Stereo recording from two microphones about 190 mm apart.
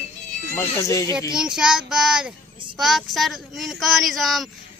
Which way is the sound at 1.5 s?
5° right (ahead or behind).